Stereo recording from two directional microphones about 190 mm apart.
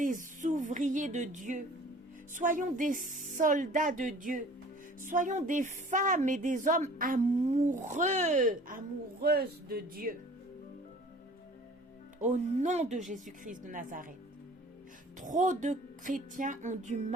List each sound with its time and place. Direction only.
0.0 s a woman's voice: 45° right (ahead or behind)
12.2 s a woman's voice: 40° right (ahead or behind)
15.2 s speech: 40° right (ahead or behind)